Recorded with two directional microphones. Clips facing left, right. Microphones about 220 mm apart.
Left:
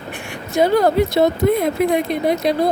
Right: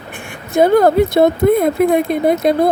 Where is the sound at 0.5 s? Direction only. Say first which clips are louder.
Right 4 dB; 55° right (ahead or behind).